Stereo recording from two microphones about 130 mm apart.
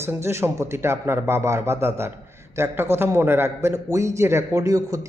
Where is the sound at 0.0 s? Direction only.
20° right (ahead or behind).